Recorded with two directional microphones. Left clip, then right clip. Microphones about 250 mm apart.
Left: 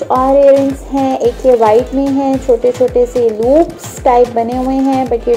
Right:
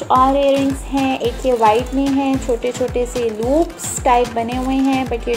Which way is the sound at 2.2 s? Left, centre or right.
Centre.